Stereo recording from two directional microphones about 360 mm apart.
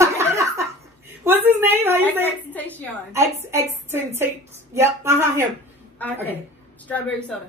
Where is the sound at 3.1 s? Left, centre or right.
Centre.